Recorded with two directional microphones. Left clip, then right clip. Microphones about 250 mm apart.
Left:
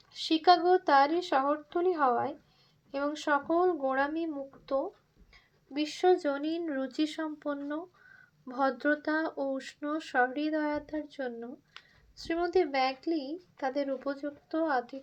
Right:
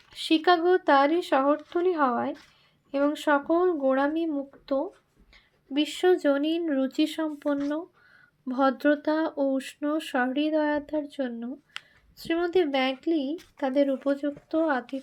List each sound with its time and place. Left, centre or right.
0.3 s speech: right
5.3 s a sound: right
6.1 s speech: right
12.5 s speech: right